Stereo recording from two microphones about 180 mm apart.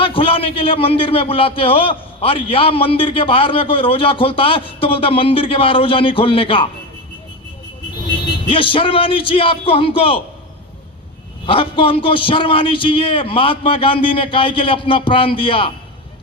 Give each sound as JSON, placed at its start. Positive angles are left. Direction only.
{"t": 0.0, "sound": "a man's voice", "side_deg": 30}
{"t": 8.4, "sound": "a man's voice", "side_deg": 30}
{"t": 11.4, "sound": "a man's voice", "side_deg": 30}